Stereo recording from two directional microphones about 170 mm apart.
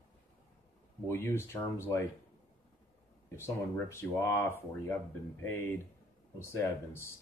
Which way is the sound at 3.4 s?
15° left (ahead or behind).